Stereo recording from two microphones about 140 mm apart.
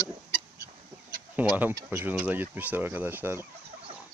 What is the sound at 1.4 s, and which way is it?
Speech, 10° right (ahead or behind).